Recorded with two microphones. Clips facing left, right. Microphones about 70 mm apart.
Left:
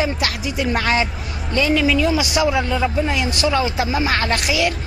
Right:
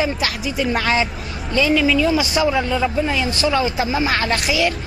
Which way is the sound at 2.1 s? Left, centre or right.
Right.